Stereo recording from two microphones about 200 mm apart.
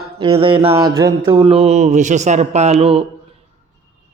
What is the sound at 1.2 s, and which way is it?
Speech, 25° right (ahead or behind).